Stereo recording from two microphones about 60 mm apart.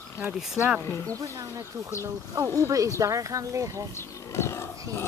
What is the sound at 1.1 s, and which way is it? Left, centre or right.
Speech, right.